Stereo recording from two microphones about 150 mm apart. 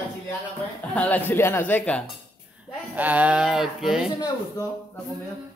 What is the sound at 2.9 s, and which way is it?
Speech, 10° right (ahead or behind).